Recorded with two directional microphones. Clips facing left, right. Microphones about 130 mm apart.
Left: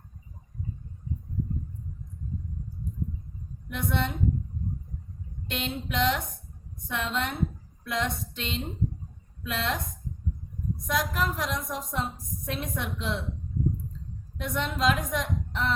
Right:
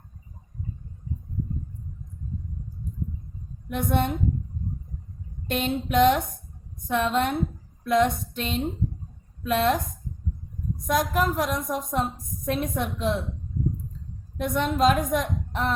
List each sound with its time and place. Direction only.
3.7 s a woman's voice: 50° right (ahead or behind)
5.5 s a woman's voice: 50° right (ahead or behind)
10.8 s a woman's voice: 50° right (ahead or behind)
14.3 s a woman's voice: 50° right (ahead or behind)